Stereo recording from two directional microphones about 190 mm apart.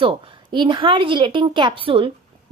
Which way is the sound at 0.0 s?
25° right (ahead or behind).